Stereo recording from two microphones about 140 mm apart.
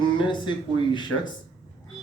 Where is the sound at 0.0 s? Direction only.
35° left (ahead or behind).